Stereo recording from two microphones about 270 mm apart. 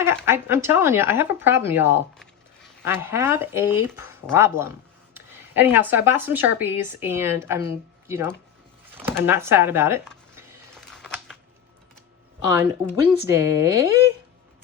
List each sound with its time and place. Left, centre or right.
0.0 s speech: centre
10.9 s a sound: centre
12.5 s speech: centre